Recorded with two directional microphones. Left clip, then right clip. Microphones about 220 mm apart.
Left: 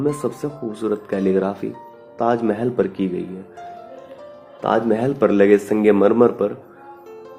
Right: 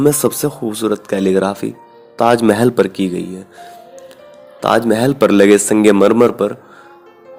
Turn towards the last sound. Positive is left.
turn(degrees=-35)  # may be behind; listen again after turning